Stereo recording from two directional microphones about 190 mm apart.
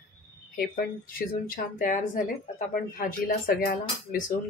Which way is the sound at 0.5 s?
50° left (ahead or behind).